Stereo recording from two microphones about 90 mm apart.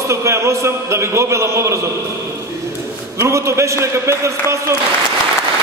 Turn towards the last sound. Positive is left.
turn(degrees=-30)  # may be behind; listen again after turning